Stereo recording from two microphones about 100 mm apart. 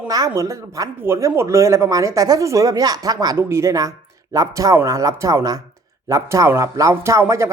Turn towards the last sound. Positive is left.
turn(degrees=-30)  # may be behind; listen again after turning